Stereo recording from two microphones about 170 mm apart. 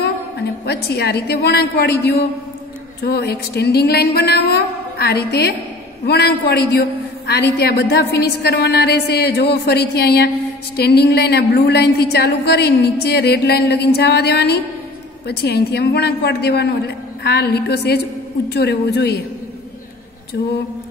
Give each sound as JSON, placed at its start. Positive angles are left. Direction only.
{"t": 0.8, "sound": "a man's voice", "side_deg": 75}